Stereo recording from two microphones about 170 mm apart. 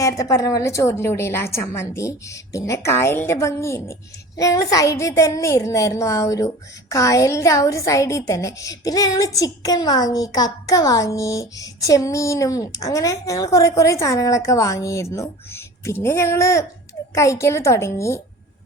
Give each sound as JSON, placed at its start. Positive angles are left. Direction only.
{"t": 0.0, "sound": "a woman's voice", "side_deg": 20}